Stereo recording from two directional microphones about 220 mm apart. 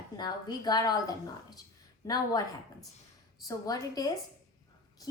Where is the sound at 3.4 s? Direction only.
15° left (ahead or behind).